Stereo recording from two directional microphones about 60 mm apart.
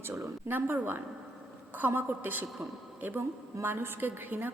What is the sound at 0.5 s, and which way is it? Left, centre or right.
A woman's voice, right.